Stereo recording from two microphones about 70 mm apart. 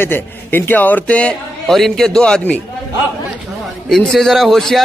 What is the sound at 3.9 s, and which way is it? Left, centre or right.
Speech, centre.